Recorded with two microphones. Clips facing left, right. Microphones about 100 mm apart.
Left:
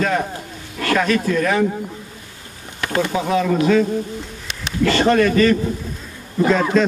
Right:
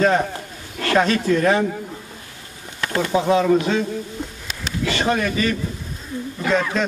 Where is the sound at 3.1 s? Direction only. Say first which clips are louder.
Right 5 dB; 25° right (ahead or behind).